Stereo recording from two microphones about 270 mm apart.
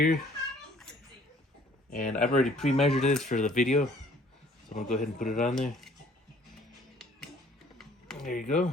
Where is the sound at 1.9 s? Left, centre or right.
Left.